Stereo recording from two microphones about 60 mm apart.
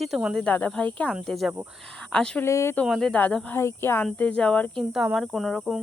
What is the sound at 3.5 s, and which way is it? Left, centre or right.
Speech, left.